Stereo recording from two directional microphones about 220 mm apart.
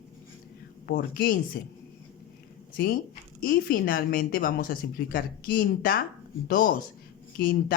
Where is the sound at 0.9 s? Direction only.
45° left (ahead or behind).